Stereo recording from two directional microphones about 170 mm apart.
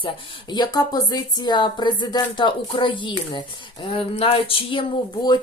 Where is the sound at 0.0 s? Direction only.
25° left (ahead or behind).